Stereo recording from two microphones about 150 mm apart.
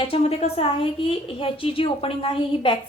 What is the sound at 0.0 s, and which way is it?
A woman's voice, 40° left (ahead or behind).